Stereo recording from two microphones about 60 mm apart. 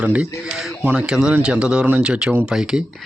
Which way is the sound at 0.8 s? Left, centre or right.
Right.